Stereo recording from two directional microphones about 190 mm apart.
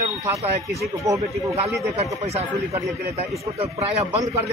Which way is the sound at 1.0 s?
15° right (ahead or behind).